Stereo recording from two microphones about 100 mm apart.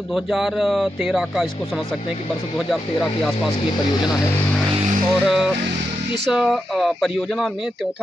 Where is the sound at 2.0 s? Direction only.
90° left.